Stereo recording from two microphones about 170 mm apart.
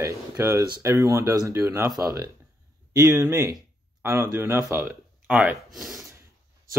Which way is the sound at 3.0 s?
20° right (ahead or behind).